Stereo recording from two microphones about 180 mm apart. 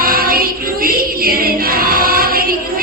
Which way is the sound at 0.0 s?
55° right (ahead or behind).